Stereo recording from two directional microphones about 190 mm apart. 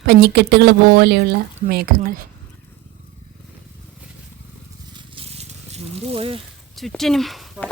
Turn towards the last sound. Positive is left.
turn(degrees=0)  # may be behind; listen again after turning